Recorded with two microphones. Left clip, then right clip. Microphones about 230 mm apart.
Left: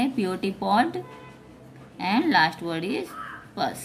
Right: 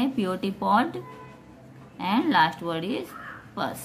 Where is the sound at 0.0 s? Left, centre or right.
Centre.